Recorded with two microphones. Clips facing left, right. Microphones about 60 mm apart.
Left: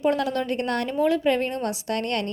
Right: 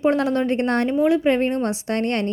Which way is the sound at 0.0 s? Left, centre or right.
Right.